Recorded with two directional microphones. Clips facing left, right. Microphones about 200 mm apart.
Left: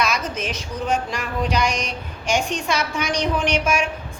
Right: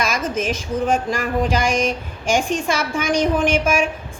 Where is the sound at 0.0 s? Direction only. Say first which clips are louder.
Right 2 dB; 50° right (ahead or behind).